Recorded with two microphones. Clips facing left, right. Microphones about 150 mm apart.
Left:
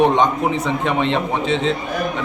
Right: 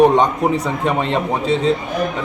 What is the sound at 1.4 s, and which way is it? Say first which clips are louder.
Speech: right 4 dB; 40° right (ahead or behind).